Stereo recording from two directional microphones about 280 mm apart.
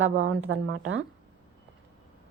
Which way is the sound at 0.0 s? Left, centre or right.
Right.